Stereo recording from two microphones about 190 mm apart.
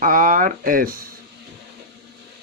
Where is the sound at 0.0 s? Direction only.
45° right (ahead or behind).